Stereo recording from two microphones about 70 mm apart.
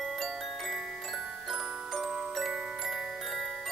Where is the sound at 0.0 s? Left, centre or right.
Centre.